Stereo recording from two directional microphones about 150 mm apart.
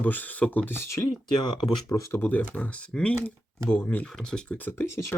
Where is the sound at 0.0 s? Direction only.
10° left (ahead or behind).